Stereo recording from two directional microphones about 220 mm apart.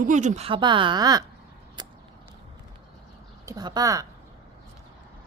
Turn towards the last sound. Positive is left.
turn(degrees=-15)  # may be behind; listen again after turning